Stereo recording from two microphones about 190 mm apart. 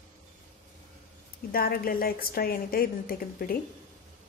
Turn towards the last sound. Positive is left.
turn(degrees=50)  # may be behind; listen again after turning